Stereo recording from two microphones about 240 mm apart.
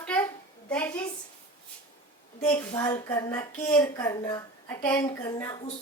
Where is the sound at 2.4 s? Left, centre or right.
Centre.